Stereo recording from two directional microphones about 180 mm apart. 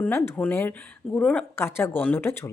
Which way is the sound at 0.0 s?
10° left (ahead or behind).